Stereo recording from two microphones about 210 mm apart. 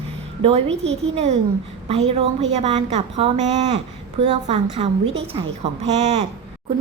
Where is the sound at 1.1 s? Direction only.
30° right (ahead or behind).